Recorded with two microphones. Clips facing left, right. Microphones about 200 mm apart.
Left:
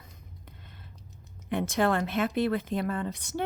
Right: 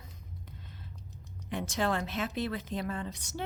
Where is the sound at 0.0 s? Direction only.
60° left (ahead or behind).